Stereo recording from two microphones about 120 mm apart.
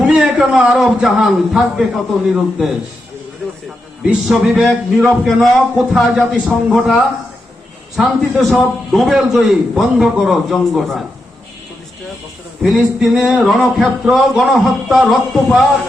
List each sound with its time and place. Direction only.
0.0 s a man's voice: 10° right (ahead or behind)
3.4 s a sound: 5° left (ahead or behind)
4.0 s a man's voice: 10° right (ahead or behind)
12.6 s a man's voice: 5° right (ahead or behind)